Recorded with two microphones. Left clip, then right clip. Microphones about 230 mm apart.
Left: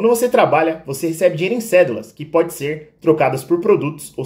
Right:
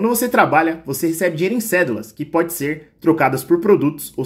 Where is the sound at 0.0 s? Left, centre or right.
Right.